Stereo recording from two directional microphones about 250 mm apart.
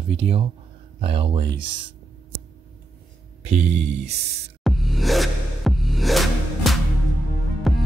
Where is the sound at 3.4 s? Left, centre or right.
Right.